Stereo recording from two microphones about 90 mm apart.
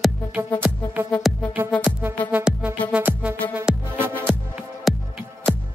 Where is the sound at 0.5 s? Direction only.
15° left (ahead or behind).